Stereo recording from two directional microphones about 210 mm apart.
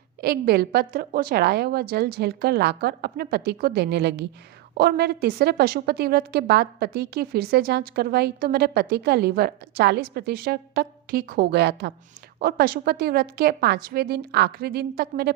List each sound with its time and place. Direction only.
0.2 s a woman's voice: 50° right (ahead or behind)